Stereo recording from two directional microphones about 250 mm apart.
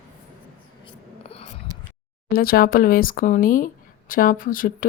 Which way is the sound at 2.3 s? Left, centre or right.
Left.